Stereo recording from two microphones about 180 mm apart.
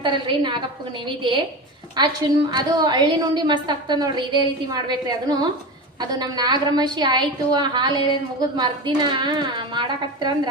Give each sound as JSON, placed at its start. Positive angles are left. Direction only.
{"t": 0.0, "sound": "a woman's voice", "side_deg": -25}